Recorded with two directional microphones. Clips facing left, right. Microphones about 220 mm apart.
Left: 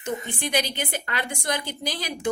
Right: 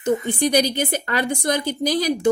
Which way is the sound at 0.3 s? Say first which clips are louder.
Right 8 dB; 40° right (ahead or behind).